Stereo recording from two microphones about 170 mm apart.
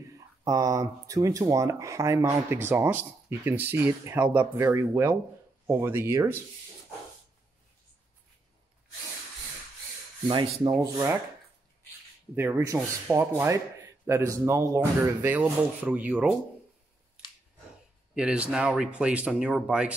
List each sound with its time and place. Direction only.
0.4 s speech: 20° right (ahead or behind)
10.7 s speech: 15° right (ahead or behind)
12.4 s speech: 15° right (ahead or behind)
18.1 s speech: 5° right (ahead or behind)